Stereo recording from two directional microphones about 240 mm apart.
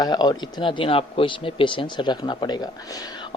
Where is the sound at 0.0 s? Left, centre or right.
Centre.